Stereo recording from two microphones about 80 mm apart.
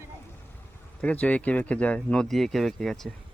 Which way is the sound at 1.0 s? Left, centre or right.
Centre.